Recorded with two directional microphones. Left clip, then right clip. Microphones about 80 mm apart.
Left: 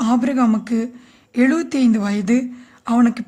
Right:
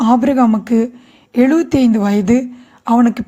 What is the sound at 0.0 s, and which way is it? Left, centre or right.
Speech, right.